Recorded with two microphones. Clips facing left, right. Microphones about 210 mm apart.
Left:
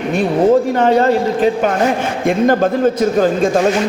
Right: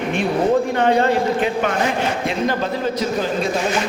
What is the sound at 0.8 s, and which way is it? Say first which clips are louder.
Speech: left 4 dB; 40° left (ahead or behind).